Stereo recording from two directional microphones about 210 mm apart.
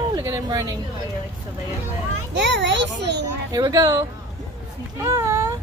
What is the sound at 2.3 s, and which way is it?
Children playing, 55° right (ahead or behind).